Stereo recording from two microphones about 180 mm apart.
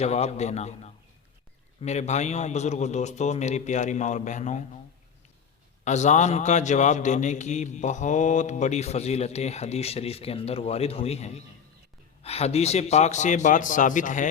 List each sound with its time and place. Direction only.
0.0 s a man's voice: 35° left (ahead or behind)
5.8 s a man's voice: 40° left (ahead or behind)